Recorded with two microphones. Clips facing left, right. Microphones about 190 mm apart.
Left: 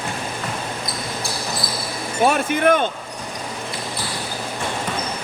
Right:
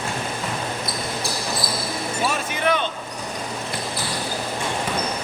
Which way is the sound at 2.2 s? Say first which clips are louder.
Left 9 dB; 55° left (ahead or behind).